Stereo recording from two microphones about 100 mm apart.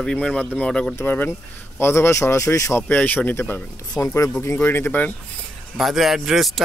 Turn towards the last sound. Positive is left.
turn(degrees=0)  # may be behind; listen again after turning